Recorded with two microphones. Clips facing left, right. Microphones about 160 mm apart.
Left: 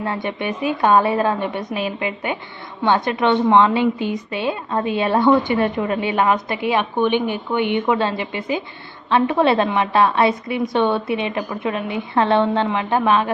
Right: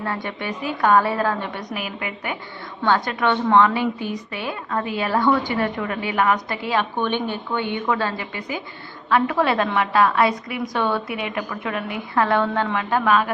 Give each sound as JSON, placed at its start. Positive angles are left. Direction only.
{"t": 0.0, "sound": "a woman's voice", "side_deg": 20}